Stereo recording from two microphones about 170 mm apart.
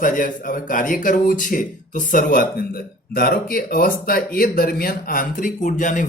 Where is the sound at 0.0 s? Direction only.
50° left (ahead or behind).